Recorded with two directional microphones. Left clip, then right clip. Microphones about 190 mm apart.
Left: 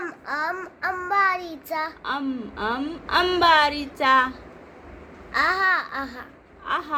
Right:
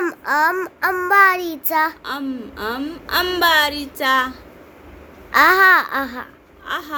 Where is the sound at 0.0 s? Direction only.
55° right (ahead or behind).